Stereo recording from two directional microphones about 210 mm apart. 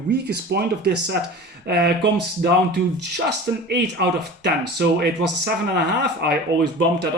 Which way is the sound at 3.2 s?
50° right (ahead or behind).